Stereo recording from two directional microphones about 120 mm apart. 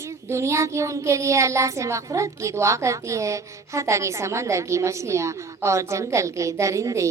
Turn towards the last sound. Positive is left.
turn(degrees=-25)  # may be behind; listen again after turning